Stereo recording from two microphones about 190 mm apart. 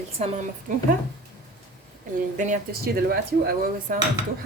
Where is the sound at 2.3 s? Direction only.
40° right (ahead or behind).